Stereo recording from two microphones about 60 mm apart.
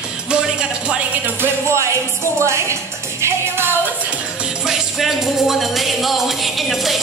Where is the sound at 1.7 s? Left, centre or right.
Right.